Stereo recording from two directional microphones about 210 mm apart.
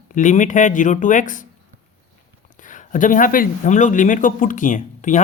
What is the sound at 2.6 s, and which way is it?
Speech, 40° left (ahead or behind).